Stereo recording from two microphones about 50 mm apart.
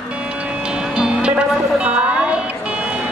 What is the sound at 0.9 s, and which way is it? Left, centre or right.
Music, centre.